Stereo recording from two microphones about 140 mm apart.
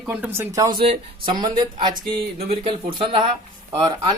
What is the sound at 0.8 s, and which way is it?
Speech, 45° right (ahead or behind).